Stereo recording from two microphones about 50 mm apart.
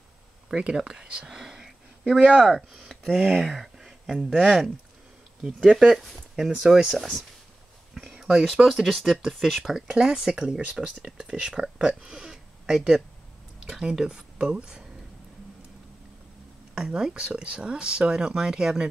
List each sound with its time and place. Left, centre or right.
0.5 s speech: centre
7.9 s a sound: centre
8.7 s speech: centre
9.6 s speech: centre
16.7 s speech: centre